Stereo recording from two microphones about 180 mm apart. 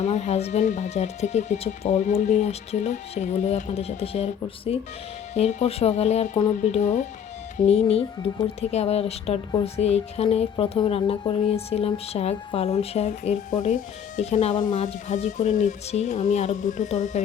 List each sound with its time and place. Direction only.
0.0 s speech: 40° left (ahead or behind)
14.8 s speech: 40° left (ahead or behind)